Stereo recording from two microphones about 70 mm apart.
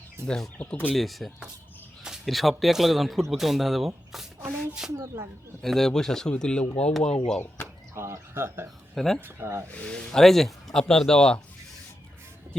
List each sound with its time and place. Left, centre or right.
0.3 s speech: centre
0.6 s speech: left
0.9 s speech: centre
4.9 s speech: right
5.6 s speech: centre
7.9 s speech: right
9.0 s speech: centre
9.2 s speech: right
9.7 s speech: centre